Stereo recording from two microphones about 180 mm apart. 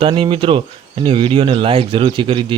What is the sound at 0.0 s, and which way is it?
Speech, 30° right (ahead or behind).